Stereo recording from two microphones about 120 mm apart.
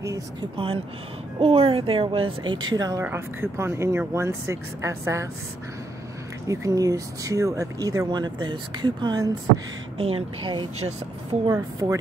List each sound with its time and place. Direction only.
0.6 s speech: 50° right (ahead or behind)
2.7 s speech: 30° right (ahead or behind)
3.0 s speech: 20° right (ahead or behind)
6.4 s speech: 25° right (ahead or behind)
9.9 s speech: 50° right (ahead or behind)
11.4 s speech: 25° right (ahead or behind)